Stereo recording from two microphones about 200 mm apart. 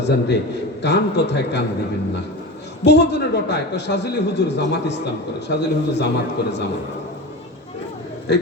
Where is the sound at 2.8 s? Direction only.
60° left (ahead or behind).